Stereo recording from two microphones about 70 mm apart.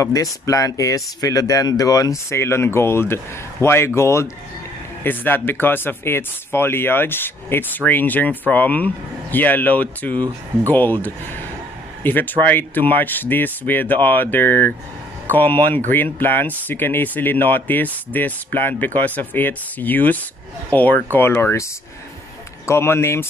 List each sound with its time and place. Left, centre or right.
0.0 s speech: left
2.2 s speech: left
5.0 s speech: left
22.7 s speech: left